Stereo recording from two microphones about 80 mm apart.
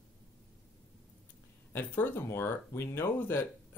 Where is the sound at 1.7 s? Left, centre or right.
Left.